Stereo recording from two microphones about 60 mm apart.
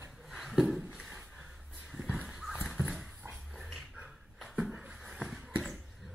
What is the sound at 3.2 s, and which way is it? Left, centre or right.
Dog, right.